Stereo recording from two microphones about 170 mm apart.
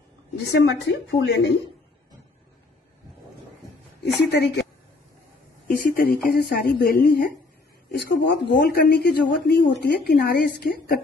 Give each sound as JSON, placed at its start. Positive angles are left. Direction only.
{"t": 0.5, "sound": "a woman's voice", "side_deg": 90}
{"t": 4.0, "sound": "a woman's voice", "side_deg": 75}
{"t": 5.7, "sound": "a woman's voice", "side_deg": 60}
{"t": 7.9, "sound": "a woman's voice", "side_deg": 75}